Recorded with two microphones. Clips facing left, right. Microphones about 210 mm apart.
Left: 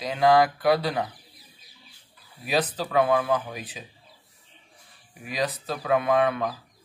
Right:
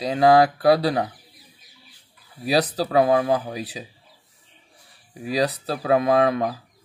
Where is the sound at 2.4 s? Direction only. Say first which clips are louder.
Right 5 dB; 35° right (ahead or behind).